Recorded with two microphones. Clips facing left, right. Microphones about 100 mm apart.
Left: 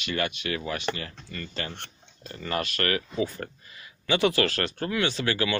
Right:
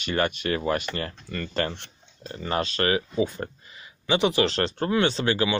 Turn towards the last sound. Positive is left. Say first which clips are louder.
# right 3 dB
turn(degrees=-25)  # may be behind; listen again after turning